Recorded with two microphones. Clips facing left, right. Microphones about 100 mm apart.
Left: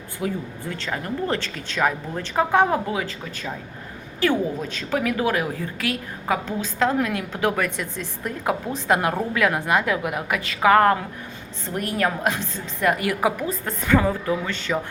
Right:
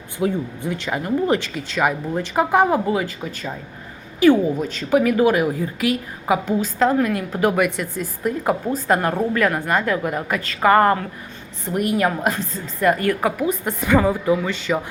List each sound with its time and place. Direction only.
0.2 s a woman's voice: 15° right (ahead or behind); by 13.3 s 5° left (ahead or behind)
13.4 s speech: 15° right (ahead or behind)